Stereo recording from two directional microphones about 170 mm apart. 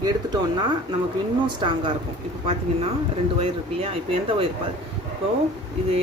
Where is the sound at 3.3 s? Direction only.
35° right (ahead or behind).